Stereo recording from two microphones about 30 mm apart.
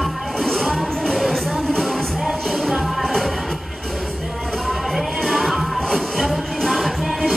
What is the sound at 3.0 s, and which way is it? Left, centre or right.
Music, centre.